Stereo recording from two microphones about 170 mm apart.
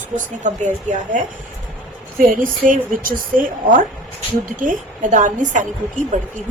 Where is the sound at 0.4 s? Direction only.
45° right (ahead or behind).